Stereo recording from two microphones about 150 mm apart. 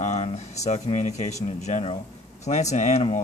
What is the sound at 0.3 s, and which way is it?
Speech, 50° left (ahead or behind).